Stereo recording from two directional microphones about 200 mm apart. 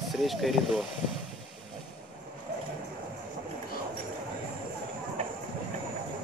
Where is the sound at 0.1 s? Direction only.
Centre (ahead or behind).